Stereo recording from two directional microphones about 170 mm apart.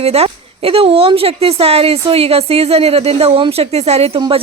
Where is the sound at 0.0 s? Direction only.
35° right (ahead or behind).